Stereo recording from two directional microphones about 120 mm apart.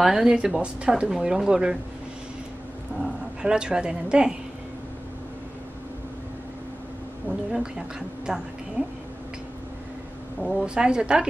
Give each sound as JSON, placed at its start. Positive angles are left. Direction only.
{"t": 0.0, "sound": "speech", "side_deg": -5}
{"t": 3.0, "sound": "speech", "side_deg": -5}
{"t": 7.2, "sound": "a woman's voice", "side_deg": -5}
{"t": 10.4, "sound": "a woman's voice", "side_deg": -5}